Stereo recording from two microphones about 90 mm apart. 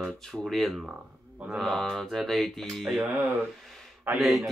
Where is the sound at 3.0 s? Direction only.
15° right (ahead or behind).